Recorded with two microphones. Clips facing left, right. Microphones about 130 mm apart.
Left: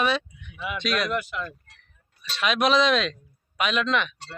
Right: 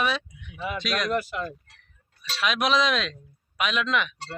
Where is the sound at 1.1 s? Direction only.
35° right (ahead or behind).